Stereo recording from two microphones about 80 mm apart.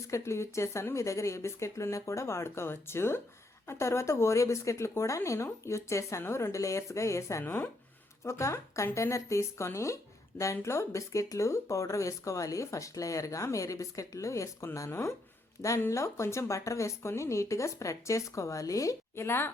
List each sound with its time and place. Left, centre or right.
0.1 s speech: left
7.4 s speech: left
8.2 s speech: left